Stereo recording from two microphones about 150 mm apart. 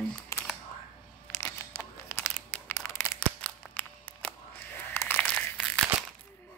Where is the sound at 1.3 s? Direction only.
15° left (ahead or behind).